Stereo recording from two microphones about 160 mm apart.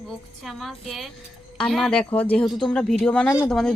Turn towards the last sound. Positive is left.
turn(degrees=5)  # may be behind; listen again after turning